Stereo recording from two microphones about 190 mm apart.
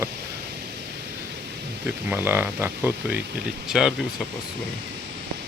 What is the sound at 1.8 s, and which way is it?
Speech, 10° right (ahead or behind).